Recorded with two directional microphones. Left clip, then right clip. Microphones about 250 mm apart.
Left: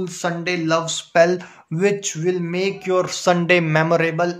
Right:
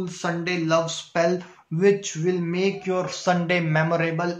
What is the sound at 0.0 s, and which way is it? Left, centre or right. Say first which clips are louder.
Speech: left 4 dB; left.